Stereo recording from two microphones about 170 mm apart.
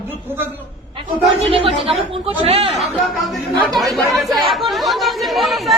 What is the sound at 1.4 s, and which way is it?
Speech, 35° right (ahead or behind).